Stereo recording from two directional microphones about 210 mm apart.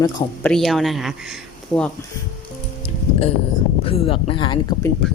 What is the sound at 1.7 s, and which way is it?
Speech, 10° left (ahead or behind).